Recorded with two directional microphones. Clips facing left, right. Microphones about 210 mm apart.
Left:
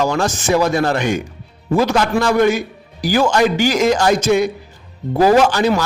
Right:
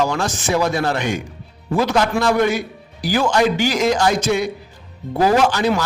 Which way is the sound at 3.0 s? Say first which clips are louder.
Left 2 dB; 45° left (ahead or behind).